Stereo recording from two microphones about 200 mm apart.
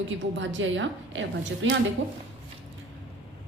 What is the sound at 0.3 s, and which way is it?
A woman's voice, 65° right (ahead or behind).